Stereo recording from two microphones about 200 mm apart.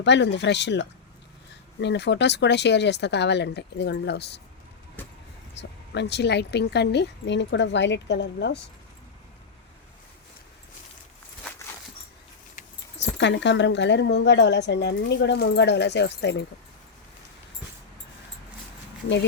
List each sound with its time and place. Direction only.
0.0 s a woman's voice: 60° left (ahead or behind)
5.5 s a woman's voice: 60° left (ahead or behind)
13.0 s a woman's voice: 60° left (ahead or behind)